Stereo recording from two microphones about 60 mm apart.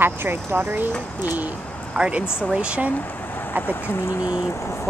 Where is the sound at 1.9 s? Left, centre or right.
Centre.